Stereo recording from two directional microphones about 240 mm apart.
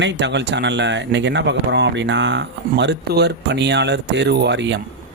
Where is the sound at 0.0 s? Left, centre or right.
Right.